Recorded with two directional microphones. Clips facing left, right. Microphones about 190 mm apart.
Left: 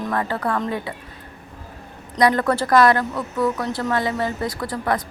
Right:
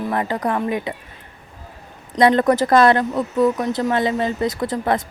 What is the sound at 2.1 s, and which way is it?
Speech, 25° right (ahead or behind).